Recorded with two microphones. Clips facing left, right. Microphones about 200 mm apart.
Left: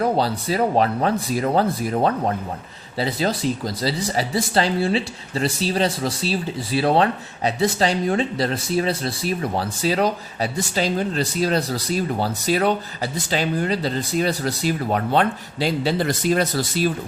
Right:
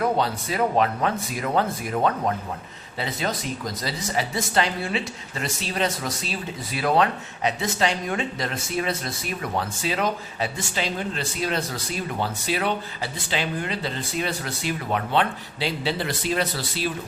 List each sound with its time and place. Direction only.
0.0 s speech: 35° left (ahead or behind)